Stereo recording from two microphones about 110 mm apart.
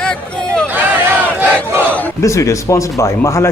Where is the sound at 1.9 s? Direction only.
15° left (ahead or behind).